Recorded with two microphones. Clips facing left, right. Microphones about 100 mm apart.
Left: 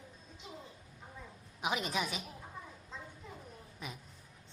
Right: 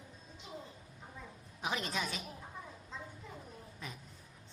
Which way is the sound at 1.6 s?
10° left (ahead or behind).